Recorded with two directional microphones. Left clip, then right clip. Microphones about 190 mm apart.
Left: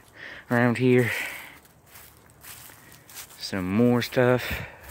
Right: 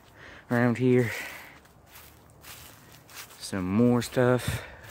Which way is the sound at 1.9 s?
55° left (ahead or behind).